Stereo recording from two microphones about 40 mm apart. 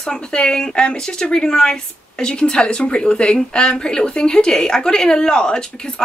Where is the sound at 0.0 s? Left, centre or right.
Left.